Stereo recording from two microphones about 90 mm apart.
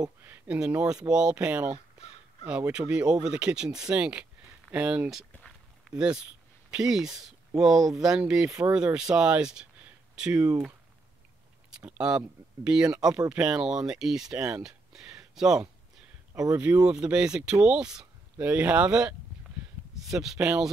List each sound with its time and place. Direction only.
0.2 s speech: 25° right (ahead or behind)
0.7 s speech: 10° right (ahead or behind)
2.9 s speech: 10° right (ahead or behind)
8.5 s speech: 35° right (ahead or behind)
8.7 s speech: 10° right (ahead or behind)
11.8 s speech: 10° right (ahead or behind)
14.6 s a sound: 5° right (ahead or behind)
16.3 s speech: 40° right (ahead or behind)
16.6 s speech: 10° right (ahead or behind)